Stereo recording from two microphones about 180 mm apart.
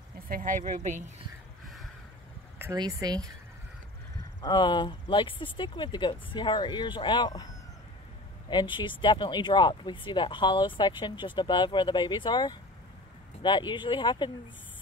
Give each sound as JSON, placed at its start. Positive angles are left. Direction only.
{"t": 0.3, "sound": "speech", "side_deg": -45}
{"t": 2.6, "sound": "speech", "side_deg": -20}
{"t": 4.4, "sound": "speech", "side_deg": 25}
{"t": 8.5, "sound": "speech", "side_deg": 25}